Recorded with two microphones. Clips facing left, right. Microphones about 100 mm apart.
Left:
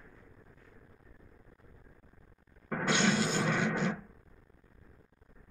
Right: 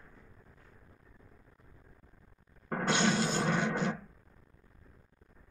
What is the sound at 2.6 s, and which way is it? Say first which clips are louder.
Roar: even; 40° right (ahead or behind).